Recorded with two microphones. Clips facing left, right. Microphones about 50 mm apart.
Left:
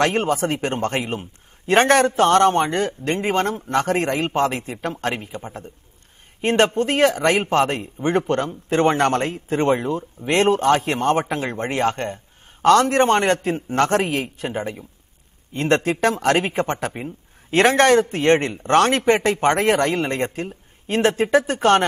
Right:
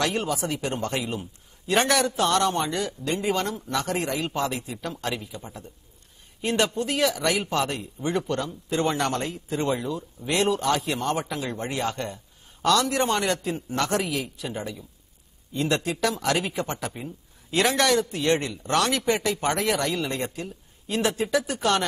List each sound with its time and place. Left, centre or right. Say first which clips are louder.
0.0 s speech: left 7 dB; left